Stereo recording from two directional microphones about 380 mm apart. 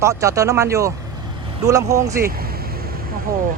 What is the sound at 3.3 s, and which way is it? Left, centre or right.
Speech, right.